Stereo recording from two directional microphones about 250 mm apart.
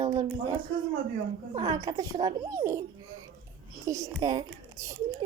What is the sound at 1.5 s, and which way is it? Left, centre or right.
A woman's voice, right.